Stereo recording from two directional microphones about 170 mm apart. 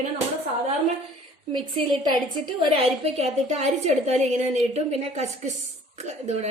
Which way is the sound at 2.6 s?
35° right (ahead or behind).